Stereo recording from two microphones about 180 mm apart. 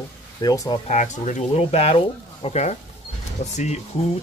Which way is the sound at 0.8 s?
40° left (ahead or behind).